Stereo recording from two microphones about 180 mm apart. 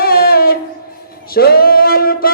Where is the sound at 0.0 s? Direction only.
60° left (ahead or behind).